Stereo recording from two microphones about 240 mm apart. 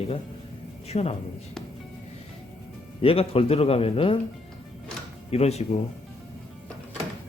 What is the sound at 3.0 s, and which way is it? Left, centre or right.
Speech, left.